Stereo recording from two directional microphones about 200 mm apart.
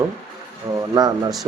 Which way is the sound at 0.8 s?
20° right (ahead or behind).